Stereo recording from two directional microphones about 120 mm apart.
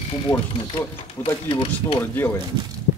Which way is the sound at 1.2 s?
45° left (ahead or behind).